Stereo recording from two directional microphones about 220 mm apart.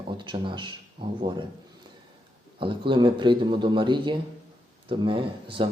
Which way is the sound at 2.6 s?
20° right (ahead or behind).